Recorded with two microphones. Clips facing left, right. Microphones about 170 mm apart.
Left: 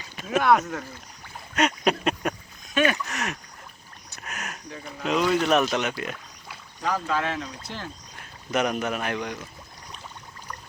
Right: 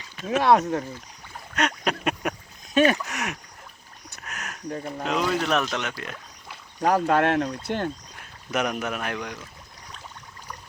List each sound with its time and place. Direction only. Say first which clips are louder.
0.3 s speech: right 2 dB; 30° right (ahead or behind)
1.5 s a sound: left 3 dB; 5° left (ahead or behind)
2.7 s speech: right 4 dB; 35° right (ahead or behind)
3.1 s speech: even; 10° right (ahead or behind)
4.3 s a sound: left 1 dB; 5° left (ahead or behind)
4.7 s speech: right 7 dB; 45° right (ahead or behind)
5.0 s speech: left 3 dB; centre (ahead or behind)
6.8 s speech: right 6 dB; 60° right (ahead or behind)
8.4 s speech: left 2 dB; 5° right (ahead or behind)